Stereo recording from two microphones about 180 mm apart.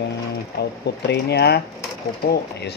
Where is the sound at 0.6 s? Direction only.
65° left (ahead or behind).